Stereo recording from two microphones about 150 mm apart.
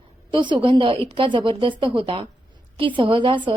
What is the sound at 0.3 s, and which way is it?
A woman's voice, 35° right (ahead or behind).